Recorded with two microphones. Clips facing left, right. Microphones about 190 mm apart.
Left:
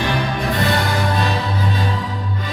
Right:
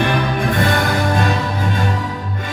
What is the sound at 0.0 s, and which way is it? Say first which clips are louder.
Music: right 3 dB; 50° right (ahead or behind).